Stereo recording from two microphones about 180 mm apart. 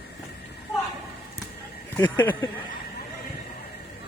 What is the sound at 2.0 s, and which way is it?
Speech, 10° left (ahead or behind).